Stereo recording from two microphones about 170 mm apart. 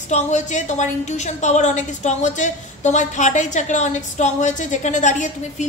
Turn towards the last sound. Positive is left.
turn(degrees=45)  # may be behind; listen again after turning